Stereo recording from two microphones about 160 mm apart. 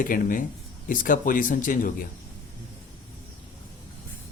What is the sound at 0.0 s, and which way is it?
A man's voice, 60° left (ahead or behind).